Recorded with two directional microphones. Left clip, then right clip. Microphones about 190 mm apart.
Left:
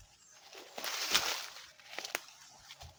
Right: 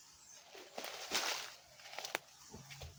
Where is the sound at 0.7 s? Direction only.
40° left (ahead or behind).